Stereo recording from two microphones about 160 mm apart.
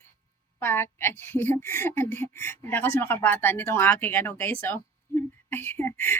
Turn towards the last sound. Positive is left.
turn(degrees=15)  # may be behind; listen again after turning